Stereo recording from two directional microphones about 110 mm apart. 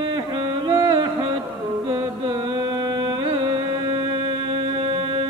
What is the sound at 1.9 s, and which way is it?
Mantra, 35° right (ahead or behind).